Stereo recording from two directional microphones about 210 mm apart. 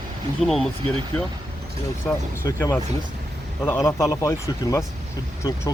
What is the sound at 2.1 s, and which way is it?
Speech, 15° left (ahead or behind).